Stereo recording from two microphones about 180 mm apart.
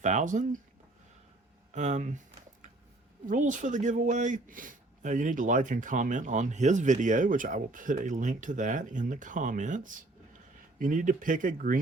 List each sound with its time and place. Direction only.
0.0 s speech: 40° right (ahead or behind)
1.7 s a sound: 40° right (ahead or behind)
3.2 s speech: 45° right (ahead or behind)